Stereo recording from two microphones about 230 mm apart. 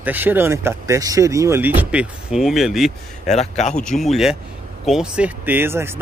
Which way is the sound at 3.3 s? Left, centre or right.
Left.